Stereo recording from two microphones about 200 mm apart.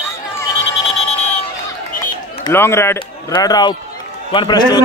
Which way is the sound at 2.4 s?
10° left (ahead or behind).